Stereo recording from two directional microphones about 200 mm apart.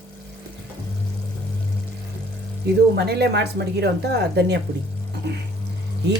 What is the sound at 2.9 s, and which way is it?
A woman's voice, 55° right (ahead or behind).